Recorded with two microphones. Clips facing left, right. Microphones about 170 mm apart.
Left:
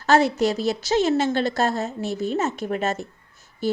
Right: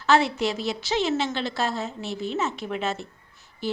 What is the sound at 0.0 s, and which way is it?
A woman's voice, 40° left (ahead or behind).